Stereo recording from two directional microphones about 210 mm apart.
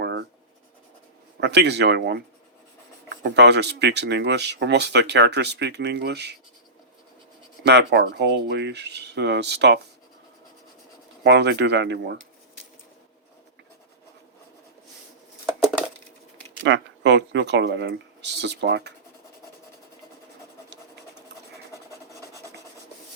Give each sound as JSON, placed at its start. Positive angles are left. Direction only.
{"t": 0.0, "sound": "writing", "side_deg": -55}
{"t": 1.4, "sound": "speech", "side_deg": -55}
{"t": 3.2, "sound": "speech", "side_deg": -55}
{"t": 7.6, "sound": "speech", "side_deg": -55}
{"t": 11.2, "sound": "speech", "side_deg": -55}
{"t": 16.6, "sound": "speech", "side_deg": -55}